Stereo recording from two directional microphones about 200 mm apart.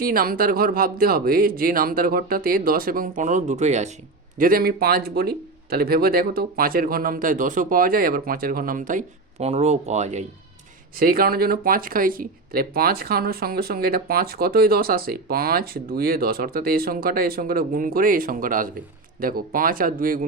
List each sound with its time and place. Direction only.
0.0 s speech: 45° right (ahead or behind)
4.4 s speech: 45° right (ahead or behind)
10.9 s speech: 45° right (ahead or behind)